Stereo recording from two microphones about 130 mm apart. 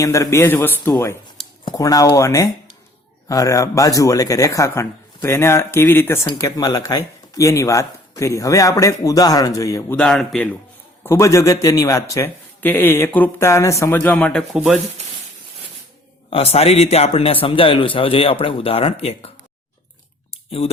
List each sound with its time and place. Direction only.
0.0 s speech: 25° left (ahead or behind)
6.2 s speech: 30° left (ahead or behind)
9.9 s speech: 5° left (ahead or behind)
11.0 s speech: 20° left (ahead or behind)
14.5 s speech: 5° right (ahead or behind)
16.3 s a man's voice: 50° left (ahead or behind)
20.3 s a sound: 50° left (ahead or behind)